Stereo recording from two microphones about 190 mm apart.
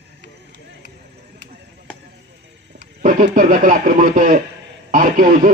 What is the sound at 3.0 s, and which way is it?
Speech, 45° right (ahead or behind).